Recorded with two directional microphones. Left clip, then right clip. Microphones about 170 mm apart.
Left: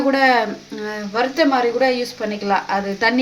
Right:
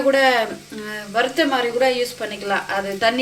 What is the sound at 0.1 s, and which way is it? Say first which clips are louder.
A woman's voice: left 1 dB; 55° left (ahead or behind).